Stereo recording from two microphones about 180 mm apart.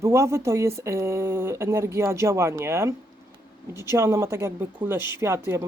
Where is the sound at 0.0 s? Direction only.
15° right (ahead or behind).